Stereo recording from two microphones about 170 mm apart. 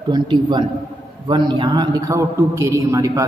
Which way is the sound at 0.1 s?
25° right (ahead or behind).